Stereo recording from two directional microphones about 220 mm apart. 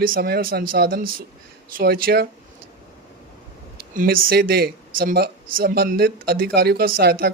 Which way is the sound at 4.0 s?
40° right (ahead or behind).